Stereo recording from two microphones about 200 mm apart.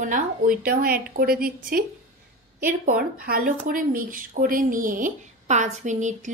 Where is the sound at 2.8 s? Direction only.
50° right (ahead or behind).